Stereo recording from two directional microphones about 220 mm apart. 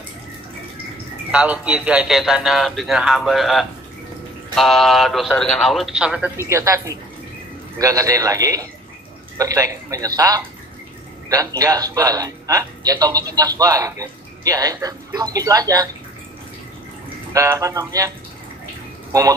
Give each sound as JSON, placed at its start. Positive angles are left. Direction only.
{"t": 1.3, "sound": "a man's voice", "side_deg": -5}
{"t": 17.3, "sound": "a man's voice", "side_deg": -15}